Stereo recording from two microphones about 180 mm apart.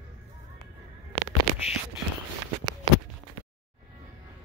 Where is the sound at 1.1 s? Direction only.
25° right (ahead or behind).